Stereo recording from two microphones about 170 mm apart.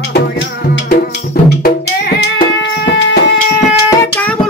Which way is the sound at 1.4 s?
65° left (ahead or behind).